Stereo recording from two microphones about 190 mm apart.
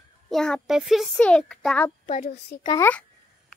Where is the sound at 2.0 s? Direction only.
40° left (ahead or behind).